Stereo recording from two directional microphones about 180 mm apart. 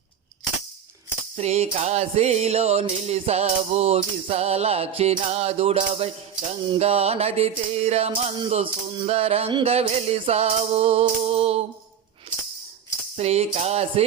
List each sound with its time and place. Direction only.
1.4 s music: 35° right (ahead or behind)
13.1 s music: 35° right (ahead or behind)